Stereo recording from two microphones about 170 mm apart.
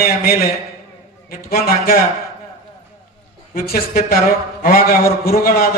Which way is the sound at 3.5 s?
60° left (ahead or behind).